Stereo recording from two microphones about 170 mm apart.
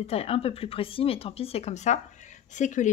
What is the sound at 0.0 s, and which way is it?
Speech, 35° left (ahead or behind).